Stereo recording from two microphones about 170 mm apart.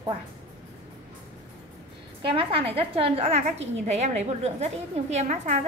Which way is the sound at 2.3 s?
35° right (ahead or behind).